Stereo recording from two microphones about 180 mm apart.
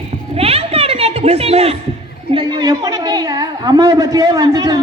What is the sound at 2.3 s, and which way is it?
A woman's voice, 25° right (ahead or behind).